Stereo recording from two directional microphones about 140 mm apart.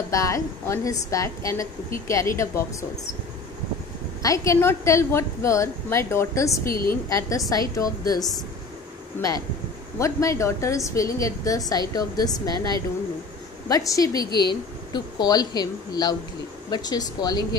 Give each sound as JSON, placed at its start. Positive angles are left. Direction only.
{"t": 0.1, "sound": "a woman's voice", "side_deg": 20}
{"t": 4.2, "sound": "a woman's voice", "side_deg": 20}
{"t": 6.6, "sound": "a woman's voice", "side_deg": 90}
{"t": 6.9, "sound": "a woman's voice", "side_deg": 25}
{"t": 9.9, "sound": "a woman's voice", "side_deg": 20}